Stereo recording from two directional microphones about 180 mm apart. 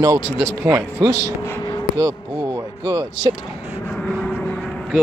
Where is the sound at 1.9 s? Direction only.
20° right (ahead or behind).